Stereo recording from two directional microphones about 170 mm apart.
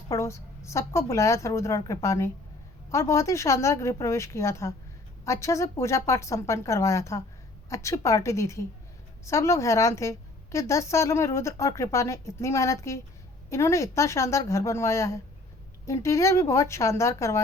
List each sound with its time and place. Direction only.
0.1 s a woman's voice: 15° left (ahead or behind)